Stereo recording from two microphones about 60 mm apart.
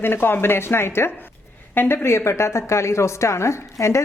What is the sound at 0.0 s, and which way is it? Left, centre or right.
A woman's voice, left.